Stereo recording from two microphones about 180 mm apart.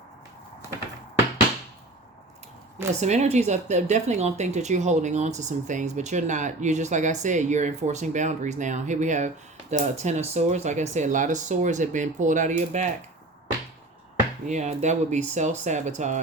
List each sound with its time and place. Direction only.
3.0 s speech: 40° right (ahead or behind)
14.4 s speech: 40° right (ahead or behind)